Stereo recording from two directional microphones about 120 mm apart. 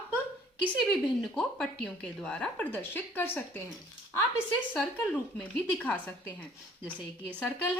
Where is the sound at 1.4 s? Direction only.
10° left (ahead or behind).